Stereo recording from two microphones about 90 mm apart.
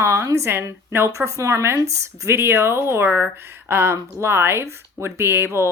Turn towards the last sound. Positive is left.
turn(degrees=-25)  # may be behind; listen again after turning